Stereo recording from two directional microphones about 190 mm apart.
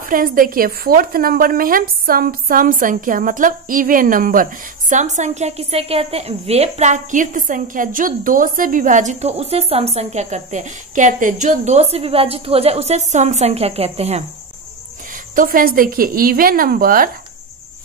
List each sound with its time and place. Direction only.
0.0 s a woman's voice: 50° right (ahead or behind); by 14.2 s 35° right (ahead or behind)
15.3 s a woman's voice: 45° right (ahead or behind)